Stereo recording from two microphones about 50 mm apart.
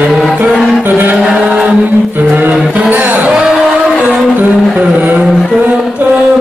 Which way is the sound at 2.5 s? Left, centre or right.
Right.